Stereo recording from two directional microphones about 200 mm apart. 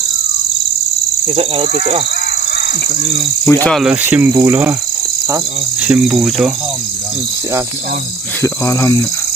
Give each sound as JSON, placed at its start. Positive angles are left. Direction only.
{"t": 1.3, "sound": "speech", "side_deg": -30}
{"t": 3.4, "sound": "speech", "side_deg": 5}
{"t": 5.8, "sound": "cricket", "side_deg": -5}
{"t": 8.4, "sound": "speech", "side_deg": 10}